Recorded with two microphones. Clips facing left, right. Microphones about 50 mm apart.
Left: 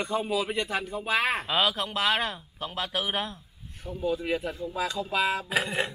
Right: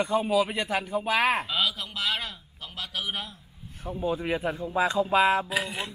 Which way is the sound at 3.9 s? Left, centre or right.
Right.